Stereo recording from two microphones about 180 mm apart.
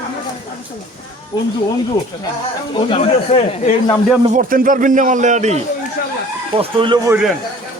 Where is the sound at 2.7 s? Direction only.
30° left (ahead or behind).